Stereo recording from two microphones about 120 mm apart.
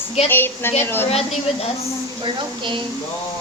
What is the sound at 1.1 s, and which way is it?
Speech, 60° left (ahead or behind).